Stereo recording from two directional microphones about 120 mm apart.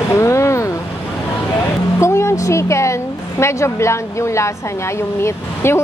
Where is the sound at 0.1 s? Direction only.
25° left (ahead or behind).